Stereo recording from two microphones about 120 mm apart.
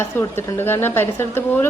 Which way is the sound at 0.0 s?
20° left (ahead or behind).